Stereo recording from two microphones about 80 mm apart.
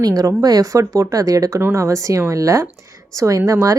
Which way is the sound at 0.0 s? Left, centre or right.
Right.